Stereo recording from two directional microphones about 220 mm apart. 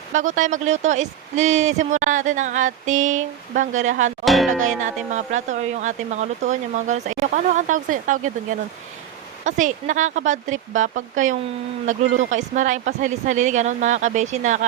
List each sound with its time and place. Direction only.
0.1 s speech: 35° right (ahead or behind)
4.3 s speech: centre (ahead or behind)
4.6 s speech: 35° right (ahead or behind)